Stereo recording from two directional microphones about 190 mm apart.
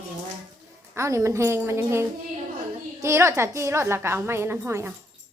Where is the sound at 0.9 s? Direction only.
15° right (ahead or behind).